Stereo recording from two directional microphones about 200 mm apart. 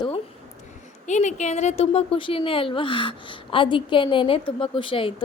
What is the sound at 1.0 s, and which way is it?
A woman's voice, 35° left (ahead or behind).